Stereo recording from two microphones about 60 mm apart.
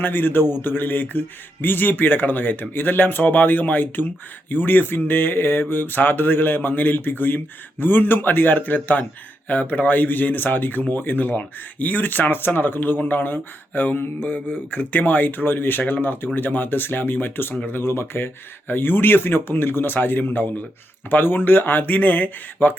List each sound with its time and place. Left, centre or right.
0.0 s mantra: left